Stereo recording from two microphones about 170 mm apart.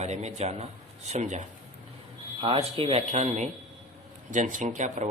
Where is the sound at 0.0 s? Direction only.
40° right (ahead or behind).